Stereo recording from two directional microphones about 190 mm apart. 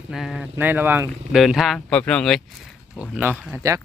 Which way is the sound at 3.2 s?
15° right (ahead or behind).